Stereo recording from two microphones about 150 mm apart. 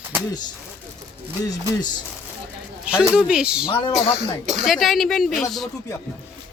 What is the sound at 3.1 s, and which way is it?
Speech, 5° right (ahead or behind).